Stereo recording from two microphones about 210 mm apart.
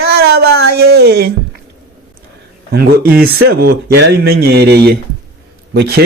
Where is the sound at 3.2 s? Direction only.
50° right (ahead or behind).